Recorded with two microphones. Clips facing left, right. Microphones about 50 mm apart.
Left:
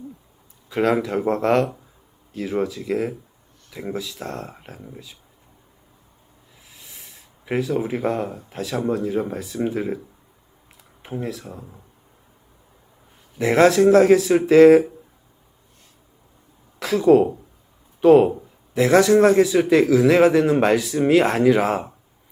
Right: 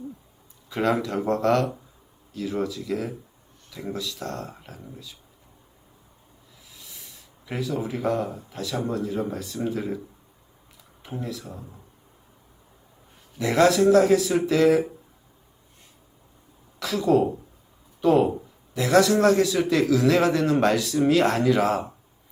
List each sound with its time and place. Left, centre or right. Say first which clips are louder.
0.7 s speech: left 4 dB; centre
4.4 s speech: left 2 dB; left
7.4 s speech: left 6 dB; left
9.6 s speech: left 5 dB; left
11.3 s speech: left 2 dB; left
13.4 s speech: left 4 dB; left
16.8 s speech: left 6 dB; left